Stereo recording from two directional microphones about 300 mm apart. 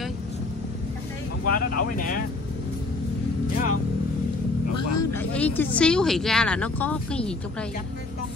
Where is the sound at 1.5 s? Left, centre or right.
Left.